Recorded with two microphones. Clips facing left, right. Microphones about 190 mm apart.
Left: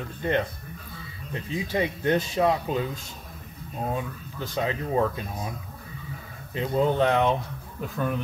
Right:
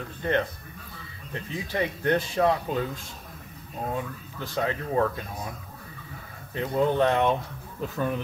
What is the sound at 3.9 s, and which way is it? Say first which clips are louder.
Speech: left 1 dB; 20° left (ahead or behind).